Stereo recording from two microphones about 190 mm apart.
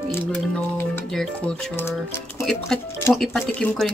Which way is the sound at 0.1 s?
10° left (ahead or behind).